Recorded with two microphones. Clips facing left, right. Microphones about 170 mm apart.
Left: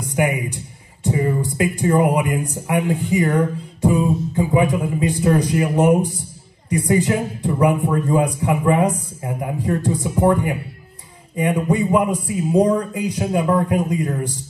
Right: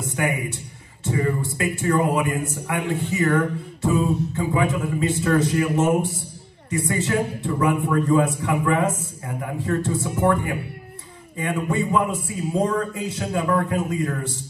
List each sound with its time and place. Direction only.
0.0 s a man's voice: 20° left (ahead or behind)